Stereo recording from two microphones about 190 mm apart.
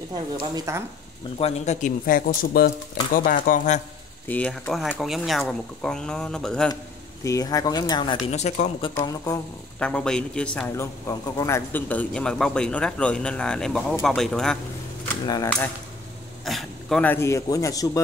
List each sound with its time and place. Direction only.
0.6 s speech: 15° right (ahead or behind)
1.4 s a man's voice: 40° left (ahead or behind)
4.3 s a man's voice: 5° left (ahead or behind)
7.2 s speech: 20° left (ahead or behind)
8.4 s speech: 35° left (ahead or behind)
8.9 s a man's voice: 20° left (ahead or behind)
9.8 s a man's voice: 5° left (ahead or behind)
15.2 s speech: 20° left (ahead or behind)
16.4 s a man's voice: centre (ahead or behind)